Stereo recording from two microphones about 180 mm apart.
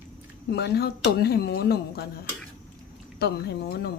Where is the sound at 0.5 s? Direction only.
65° left (ahead or behind).